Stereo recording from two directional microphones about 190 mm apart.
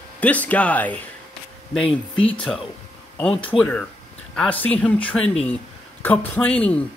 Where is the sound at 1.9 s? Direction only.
25° left (ahead or behind).